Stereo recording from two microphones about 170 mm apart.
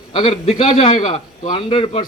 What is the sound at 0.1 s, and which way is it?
A man's voice, 30° left (ahead or behind).